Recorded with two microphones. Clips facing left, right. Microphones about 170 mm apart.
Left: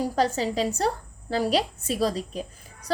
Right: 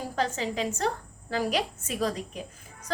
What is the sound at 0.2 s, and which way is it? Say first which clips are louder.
A woman's voice: left 3 dB; 35° left (ahead or behind).